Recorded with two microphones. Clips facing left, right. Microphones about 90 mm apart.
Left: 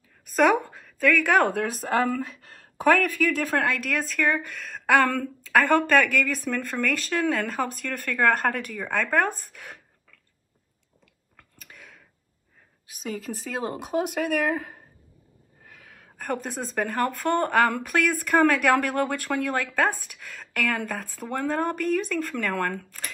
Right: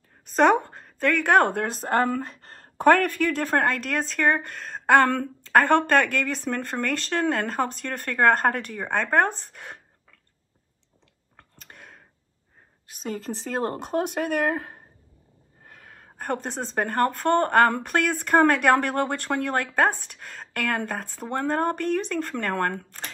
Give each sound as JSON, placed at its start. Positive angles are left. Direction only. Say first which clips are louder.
{"t": 0.4, "sound": "a woman's voice", "louder": "right 1 dB", "side_deg": -30}
{"t": 1.9, "sound": "a sound", "louder": "right 2 dB", "side_deg": -40}
{"t": 3.1, "sound": "speech", "louder": "even", "side_deg": 5}
{"t": 3.3, "sound": "a woman's voice", "louder": "right 2 dB", "side_deg": -45}
{"t": 11.3, "sound": "clicking", "louder": "right 1 dB", "side_deg": -35}
{"t": 12.9, "sound": "speech", "louder": "right 1 dB", "side_deg": -35}
{"t": 13.2, "sound": "speech", "louder": "right 5 dB", "side_deg": 5}
{"t": 15.7, "sound": "gasp", "louder": "right 2 dB", "side_deg": -40}
{"t": 16.7, "sound": "a woman's voice", "louder": "right 3 dB", "side_deg": -40}